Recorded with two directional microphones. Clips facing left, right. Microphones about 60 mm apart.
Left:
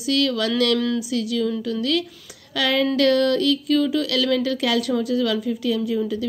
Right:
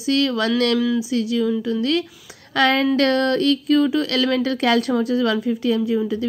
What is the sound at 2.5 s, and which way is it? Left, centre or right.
A woman's voice, right.